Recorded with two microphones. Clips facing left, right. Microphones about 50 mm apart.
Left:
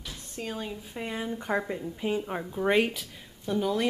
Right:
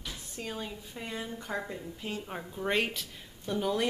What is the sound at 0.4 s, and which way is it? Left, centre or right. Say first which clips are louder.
Speech: left 4 dB; centre.